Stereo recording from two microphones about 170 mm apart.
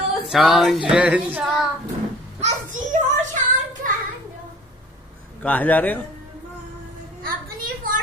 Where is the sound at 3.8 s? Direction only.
50° right (ahead or behind).